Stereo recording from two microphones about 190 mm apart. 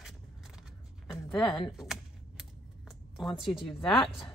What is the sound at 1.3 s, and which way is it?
Speech, 5° left (ahead or behind).